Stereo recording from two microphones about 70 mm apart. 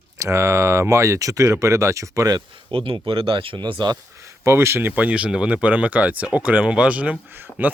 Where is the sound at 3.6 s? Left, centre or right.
Right.